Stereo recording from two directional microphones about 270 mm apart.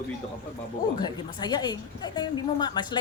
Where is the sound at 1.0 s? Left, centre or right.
Centre.